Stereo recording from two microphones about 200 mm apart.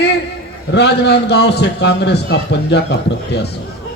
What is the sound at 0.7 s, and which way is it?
A man's voice, 55° left (ahead or behind).